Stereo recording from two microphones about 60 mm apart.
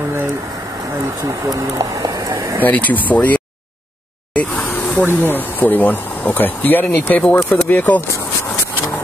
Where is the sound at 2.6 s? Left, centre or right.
Left.